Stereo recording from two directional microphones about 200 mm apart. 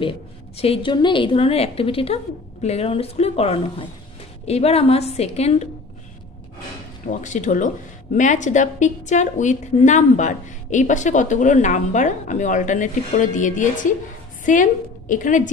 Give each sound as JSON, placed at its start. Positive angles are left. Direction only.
{"t": 0.6, "sound": "a woman's voice", "side_deg": 25}
{"t": 7.1, "sound": "a woman's voice", "side_deg": 40}